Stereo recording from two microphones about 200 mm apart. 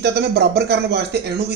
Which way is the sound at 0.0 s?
55° right (ahead or behind).